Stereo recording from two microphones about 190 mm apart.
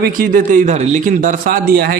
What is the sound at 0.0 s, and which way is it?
A man's voice, 45° right (ahead or behind).